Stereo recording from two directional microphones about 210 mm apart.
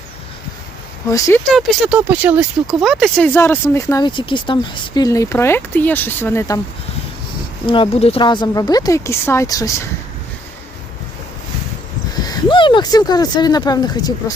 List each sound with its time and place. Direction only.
1.0 s speech: 15° left (ahead or behind)
1.5 s speech: centre (ahead or behind)
7.7 s speech: 25° left (ahead or behind)
12.2 s speech: 20° left (ahead or behind)